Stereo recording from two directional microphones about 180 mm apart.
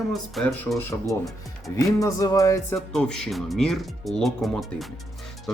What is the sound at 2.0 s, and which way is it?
Speech, 20° left (ahead or behind).